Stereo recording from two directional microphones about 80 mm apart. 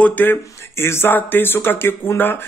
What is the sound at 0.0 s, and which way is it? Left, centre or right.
Speech, left.